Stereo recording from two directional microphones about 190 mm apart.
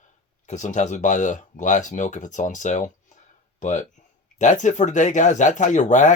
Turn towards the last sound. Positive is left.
turn(degrees=40)  # may be behind; listen again after turning